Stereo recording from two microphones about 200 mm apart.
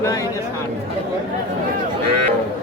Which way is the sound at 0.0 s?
15° left (ahead or behind).